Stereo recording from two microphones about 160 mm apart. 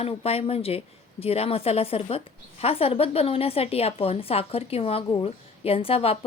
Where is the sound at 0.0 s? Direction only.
35° left (ahead or behind).